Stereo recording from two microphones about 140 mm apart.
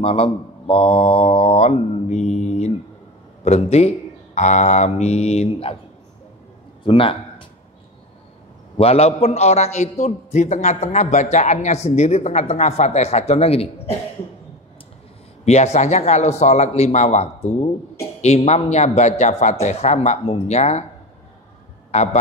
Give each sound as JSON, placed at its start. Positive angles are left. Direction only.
{"t": 0.0, "sound": "a man's voice", "side_deg": 45}
{"t": 6.8, "sound": "speech", "side_deg": 40}
{"t": 8.7, "sound": "a man's voice", "side_deg": 45}
{"t": 15.4, "sound": "a man's voice", "side_deg": 50}
{"t": 21.9, "sound": "speech", "side_deg": 55}